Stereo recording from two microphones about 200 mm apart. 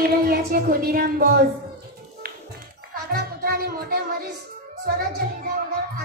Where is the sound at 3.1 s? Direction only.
50° right (ahead or behind).